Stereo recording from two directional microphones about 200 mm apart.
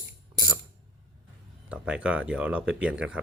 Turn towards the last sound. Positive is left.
turn(degrees=-5)  # may be behind; listen again after turning